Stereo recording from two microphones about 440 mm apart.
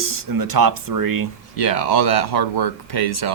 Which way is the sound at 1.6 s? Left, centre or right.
Left.